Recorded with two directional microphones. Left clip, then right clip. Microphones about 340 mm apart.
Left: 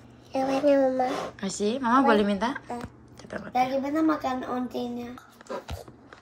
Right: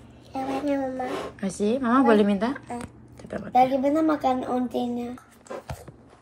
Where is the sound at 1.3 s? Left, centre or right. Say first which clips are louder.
Right 3 dB; centre.